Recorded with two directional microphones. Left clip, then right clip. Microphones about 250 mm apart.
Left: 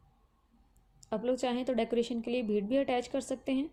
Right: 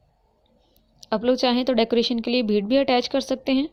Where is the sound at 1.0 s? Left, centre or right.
Right.